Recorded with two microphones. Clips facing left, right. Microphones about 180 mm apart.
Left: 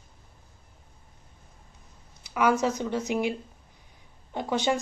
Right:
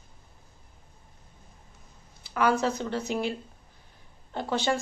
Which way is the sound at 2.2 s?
15° left (ahead or behind).